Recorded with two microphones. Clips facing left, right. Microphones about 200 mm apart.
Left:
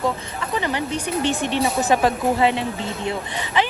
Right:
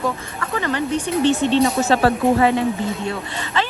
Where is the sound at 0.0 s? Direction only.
20° left (ahead or behind).